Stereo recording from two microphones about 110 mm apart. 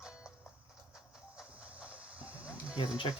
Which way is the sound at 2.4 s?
10° right (ahead or behind).